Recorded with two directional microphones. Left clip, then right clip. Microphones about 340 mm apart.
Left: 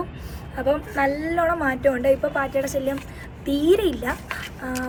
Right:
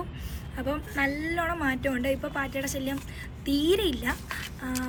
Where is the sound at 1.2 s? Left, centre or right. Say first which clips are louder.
Left 7 dB; centre.